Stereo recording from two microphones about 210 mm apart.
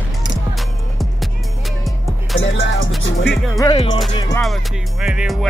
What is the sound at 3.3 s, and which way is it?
Music, centre (ahead or behind).